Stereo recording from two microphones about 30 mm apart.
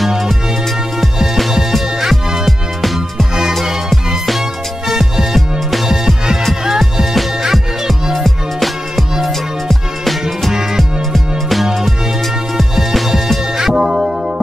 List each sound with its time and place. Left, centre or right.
1.2 s music: centre
2.4 s music: centre
4.8 s music: centre
8.2 s music: centre
10.8 s music: centre
13.6 s music: centre